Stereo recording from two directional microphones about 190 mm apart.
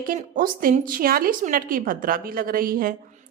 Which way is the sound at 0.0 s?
50° right (ahead or behind).